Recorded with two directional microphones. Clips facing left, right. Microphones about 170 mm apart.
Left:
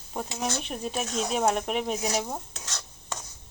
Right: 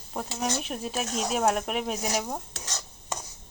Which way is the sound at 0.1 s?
5° left (ahead or behind).